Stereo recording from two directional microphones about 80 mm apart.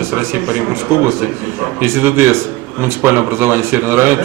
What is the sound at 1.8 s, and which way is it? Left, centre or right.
A man's voice, right.